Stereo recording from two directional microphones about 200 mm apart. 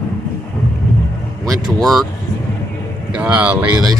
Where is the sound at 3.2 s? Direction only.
5° right (ahead or behind).